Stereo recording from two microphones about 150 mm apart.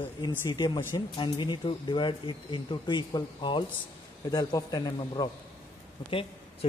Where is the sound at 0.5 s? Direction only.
30° left (ahead or behind).